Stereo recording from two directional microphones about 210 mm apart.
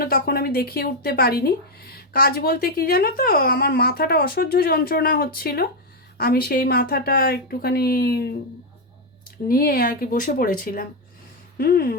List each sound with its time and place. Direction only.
0.0 s speech: 45° left (ahead or behind)
9.5 s speech: 45° left (ahead or behind)